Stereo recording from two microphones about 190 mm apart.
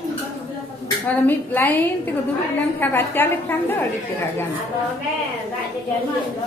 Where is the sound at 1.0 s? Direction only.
10° left (ahead or behind).